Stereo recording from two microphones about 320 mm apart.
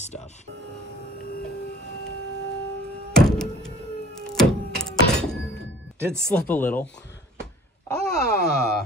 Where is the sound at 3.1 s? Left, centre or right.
Centre.